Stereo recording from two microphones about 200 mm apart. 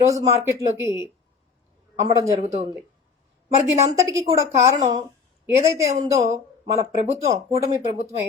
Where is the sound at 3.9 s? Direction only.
15° right (ahead or behind).